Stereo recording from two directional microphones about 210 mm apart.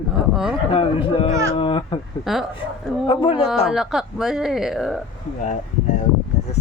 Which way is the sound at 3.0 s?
25° left (ahead or behind).